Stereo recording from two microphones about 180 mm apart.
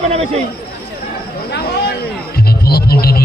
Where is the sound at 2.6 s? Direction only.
60° left (ahead or behind).